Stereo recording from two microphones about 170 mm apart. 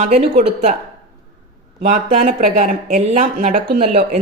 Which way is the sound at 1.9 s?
50° right (ahead or behind).